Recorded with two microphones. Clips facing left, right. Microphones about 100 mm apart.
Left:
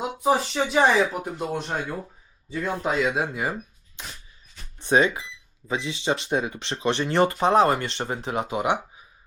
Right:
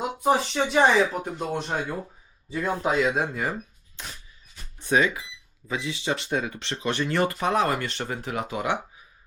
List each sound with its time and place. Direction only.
0.2 s speech: centre (ahead or behind)
4.0 s a sound: centre (ahead or behind)
4.8 s speech: 30° left (ahead or behind)